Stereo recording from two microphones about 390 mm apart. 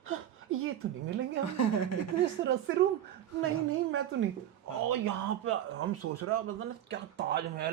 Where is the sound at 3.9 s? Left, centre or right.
Right.